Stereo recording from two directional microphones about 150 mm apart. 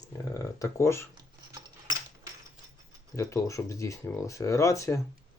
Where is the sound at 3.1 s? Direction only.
20° left (ahead or behind).